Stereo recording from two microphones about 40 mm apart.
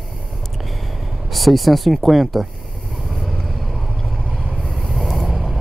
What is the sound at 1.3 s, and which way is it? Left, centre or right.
Speech, centre.